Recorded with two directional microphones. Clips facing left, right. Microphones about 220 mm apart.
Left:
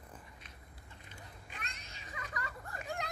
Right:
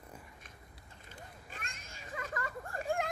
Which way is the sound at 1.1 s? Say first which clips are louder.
Right 3 dB; 45° right (ahead or behind).